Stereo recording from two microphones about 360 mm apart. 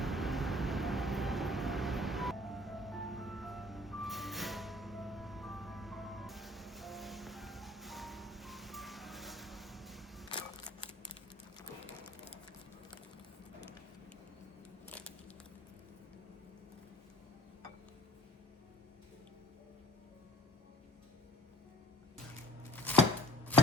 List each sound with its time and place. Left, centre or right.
0.0 s vehicle: centre
10.2 s single-lens reflex camera: centre
14.8 s a sound: centre
22.7 s chopping: centre